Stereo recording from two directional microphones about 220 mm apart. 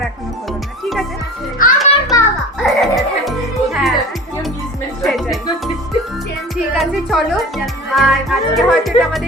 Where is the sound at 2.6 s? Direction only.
Centre (ahead or behind).